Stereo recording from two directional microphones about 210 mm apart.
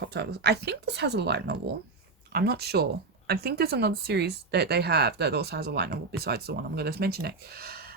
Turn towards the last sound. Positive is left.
turn(degrees=-45)  # may be behind; listen again after turning